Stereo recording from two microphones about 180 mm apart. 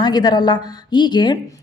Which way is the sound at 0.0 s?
25° left (ahead or behind).